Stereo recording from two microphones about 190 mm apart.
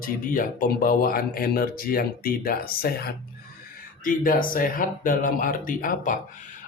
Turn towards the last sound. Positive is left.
turn(degrees=45)  # may be behind; listen again after turning